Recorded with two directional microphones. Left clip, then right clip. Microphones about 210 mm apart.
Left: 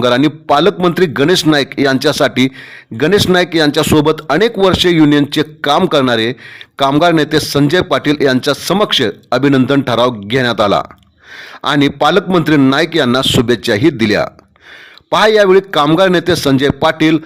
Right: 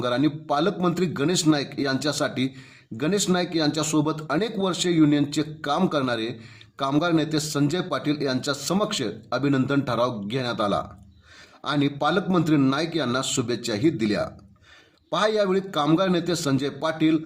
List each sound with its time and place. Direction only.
0.0 s a man's voice: 45° left (ahead or behind)